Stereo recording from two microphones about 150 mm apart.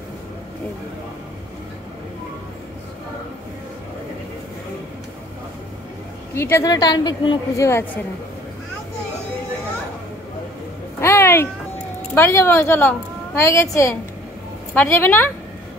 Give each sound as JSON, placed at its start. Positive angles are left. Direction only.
{"t": 6.3, "sound": "a woman's voice", "side_deg": 15}
{"t": 11.0, "sound": "a sound", "side_deg": 15}
{"t": 12.1, "sound": "a woman's voice", "side_deg": 15}